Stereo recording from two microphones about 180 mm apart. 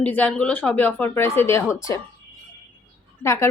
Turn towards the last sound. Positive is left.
turn(degrees=15)  # may be behind; listen again after turning